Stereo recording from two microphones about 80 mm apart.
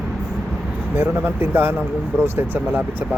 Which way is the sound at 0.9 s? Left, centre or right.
Right.